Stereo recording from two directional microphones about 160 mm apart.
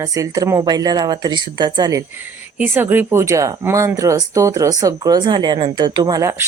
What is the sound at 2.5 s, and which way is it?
Speech, 10° right (ahead or behind).